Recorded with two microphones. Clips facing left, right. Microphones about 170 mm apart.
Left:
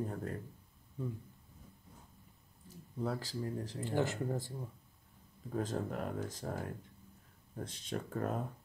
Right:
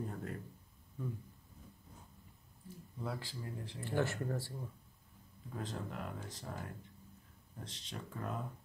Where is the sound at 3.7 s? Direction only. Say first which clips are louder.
Left 1 dB; 20° left (ahead or behind).